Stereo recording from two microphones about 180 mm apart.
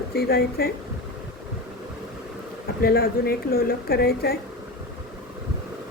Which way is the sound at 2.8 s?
60° left (ahead or behind).